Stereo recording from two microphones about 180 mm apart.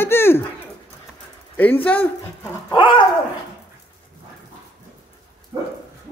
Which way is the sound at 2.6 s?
25° left (ahead or behind).